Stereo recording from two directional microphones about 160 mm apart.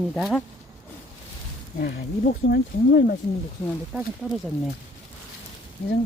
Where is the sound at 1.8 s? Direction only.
75° left (ahead or behind).